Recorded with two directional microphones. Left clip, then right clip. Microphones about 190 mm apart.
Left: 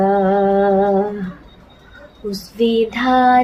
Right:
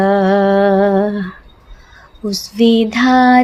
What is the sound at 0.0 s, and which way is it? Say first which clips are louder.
Humming: right 2 dB; 60° right (ahead or behind).